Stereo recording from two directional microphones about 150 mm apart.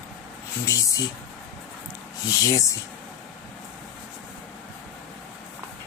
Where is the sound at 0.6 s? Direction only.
20° left (ahead or behind).